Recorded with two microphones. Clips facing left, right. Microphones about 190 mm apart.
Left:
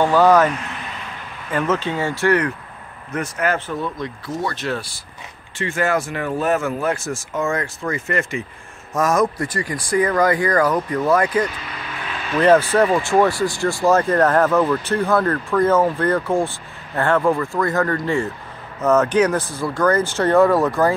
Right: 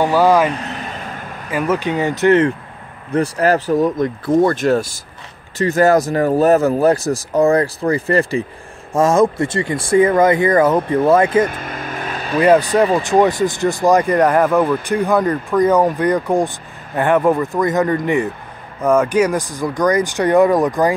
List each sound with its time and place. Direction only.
0.0 s speech: 10° right (ahead or behind)
0.5 s vehicle: 35° right (ahead or behind)
1.5 s speech: 10° right (ahead or behind)
3.1 s speech: 35° right (ahead or behind)
11.4 s vehicle: 50° right (ahead or behind)
12.4 s speech: 15° right (ahead or behind)